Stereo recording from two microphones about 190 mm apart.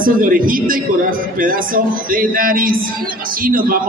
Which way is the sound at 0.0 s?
45° right (ahead or behind).